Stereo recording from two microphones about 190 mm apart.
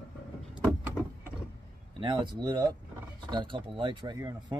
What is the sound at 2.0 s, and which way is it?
Speech, 25° right (ahead or behind).